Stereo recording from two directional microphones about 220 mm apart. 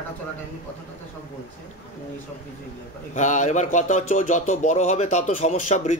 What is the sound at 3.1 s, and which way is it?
A man's voice, 35° left (ahead or behind).